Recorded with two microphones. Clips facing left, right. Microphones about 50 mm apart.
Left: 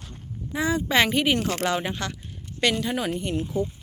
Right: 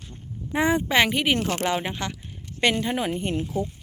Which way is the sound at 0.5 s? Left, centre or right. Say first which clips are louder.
Right 2 dB; right.